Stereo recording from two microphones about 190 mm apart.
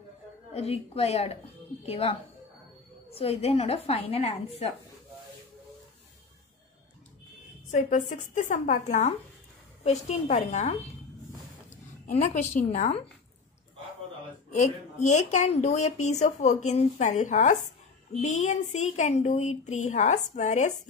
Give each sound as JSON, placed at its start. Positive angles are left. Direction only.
{"t": 0.6, "sound": "a woman's voice", "side_deg": 30}
{"t": 7.7, "sound": "a woman's voice", "side_deg": 40}
{"t": 14.5, "sound": "a woman's voice", "side_deg": 40}